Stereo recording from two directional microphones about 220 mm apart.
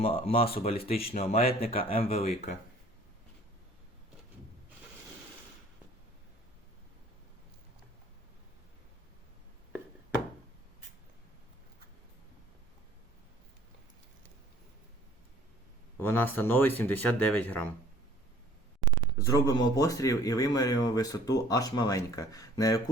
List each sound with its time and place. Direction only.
0.0 s speech: 25° left (ahead or behind)
16.0 s speech: 10° left (ahead or behind)
19.2 s speech: 15° left (ahead or behind)